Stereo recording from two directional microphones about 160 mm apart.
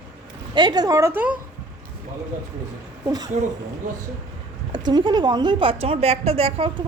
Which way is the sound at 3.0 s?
25° right (ahead or behind).